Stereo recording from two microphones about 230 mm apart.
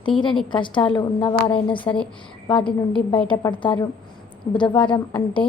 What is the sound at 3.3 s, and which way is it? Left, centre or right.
A woman's voice, left.